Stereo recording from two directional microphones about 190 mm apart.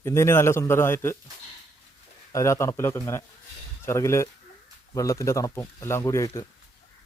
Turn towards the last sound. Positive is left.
turn(degrees=15)  # may be behind; listen again after turning